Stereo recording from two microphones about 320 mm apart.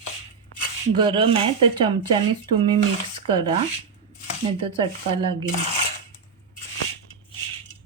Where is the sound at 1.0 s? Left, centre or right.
Centre.